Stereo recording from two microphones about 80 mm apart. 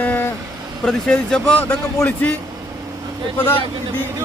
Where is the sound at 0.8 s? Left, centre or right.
Centre.